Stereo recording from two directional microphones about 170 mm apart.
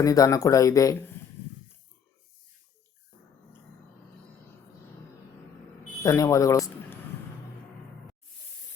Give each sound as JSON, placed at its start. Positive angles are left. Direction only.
{"t": 0.0, "sound": "speech", "side_deg": 20}
{"t": 6.0, "sound": "speech", "side_deg": 20}